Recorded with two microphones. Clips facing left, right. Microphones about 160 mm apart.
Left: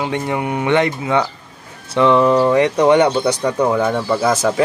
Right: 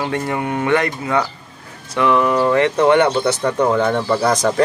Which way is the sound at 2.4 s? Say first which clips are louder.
Left 1 dB; 15° left (ahead or behind).